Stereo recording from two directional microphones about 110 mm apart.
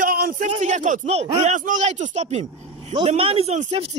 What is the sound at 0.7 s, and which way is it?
Speech, 70° right (ahead or behind).